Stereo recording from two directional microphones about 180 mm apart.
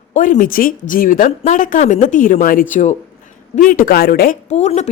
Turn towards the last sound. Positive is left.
turn(degrees=40)  # may be behind; listen again after turning